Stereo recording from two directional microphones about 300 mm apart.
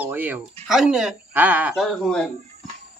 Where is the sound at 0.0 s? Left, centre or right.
Centre.